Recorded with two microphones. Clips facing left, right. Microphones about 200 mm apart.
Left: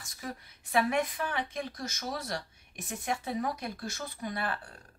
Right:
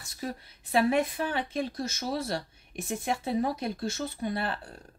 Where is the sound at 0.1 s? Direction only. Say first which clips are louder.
Right 5 dB; 30° right (ahead or behind).